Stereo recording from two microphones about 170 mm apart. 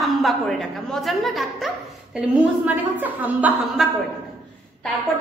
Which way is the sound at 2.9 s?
10° right (ahead or behind).